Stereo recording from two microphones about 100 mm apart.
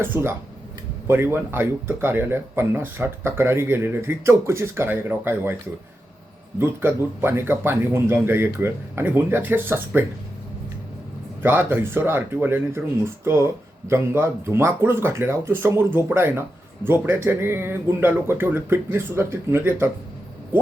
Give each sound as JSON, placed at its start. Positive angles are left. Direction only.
{"t": 0.0, "sound": "speech", "side_deg": -20}
{"t": 6.6, "sound": "speech", "side_deg": -20}
{"t": 11.4, "sound": "speech", "side_deg": -20}